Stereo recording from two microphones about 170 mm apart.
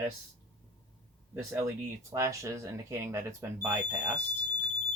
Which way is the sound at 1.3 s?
15° right (ahead or behind).